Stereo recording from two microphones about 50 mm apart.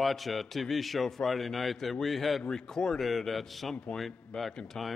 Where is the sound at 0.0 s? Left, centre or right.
Centre.